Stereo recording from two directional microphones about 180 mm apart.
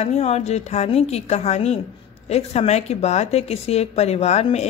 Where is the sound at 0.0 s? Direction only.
40° left (ahead or behind).